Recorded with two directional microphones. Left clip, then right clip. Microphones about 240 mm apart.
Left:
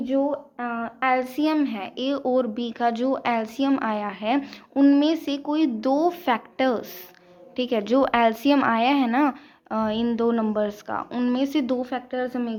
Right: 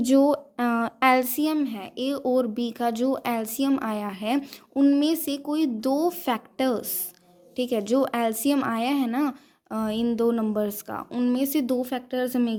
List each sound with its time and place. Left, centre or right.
0.0 s a woman's voice: right